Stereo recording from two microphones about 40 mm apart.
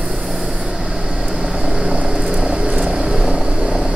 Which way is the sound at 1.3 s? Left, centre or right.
Right.